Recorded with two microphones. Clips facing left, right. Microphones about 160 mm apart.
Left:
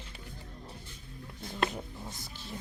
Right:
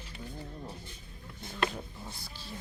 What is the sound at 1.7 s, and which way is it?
Music, 20° left (ahead or behind).